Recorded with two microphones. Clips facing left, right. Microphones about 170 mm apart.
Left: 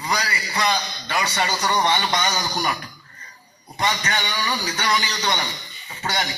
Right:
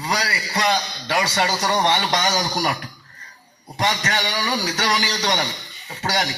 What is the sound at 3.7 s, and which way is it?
A man's voice, 80° right.